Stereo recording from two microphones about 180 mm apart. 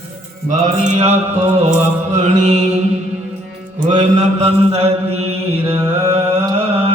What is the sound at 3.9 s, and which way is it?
Mantra, 40° right (ahead or behind).